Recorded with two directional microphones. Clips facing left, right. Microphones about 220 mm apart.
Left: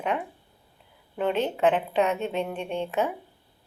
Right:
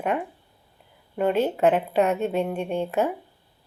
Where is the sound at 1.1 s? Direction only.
45° right (ahead or behind).